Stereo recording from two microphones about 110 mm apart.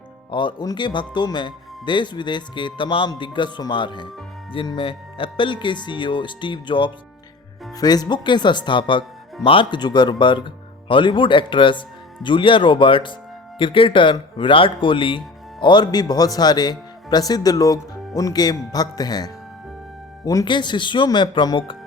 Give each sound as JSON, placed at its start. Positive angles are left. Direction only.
{"t": 0.3, "sound": "speech", "side_deg": 45}
{"t": 7.8, "sound": "a man's voice", "side_deg": 35}
{"t": 20.5, "sound": "speech", "side_deg": 45}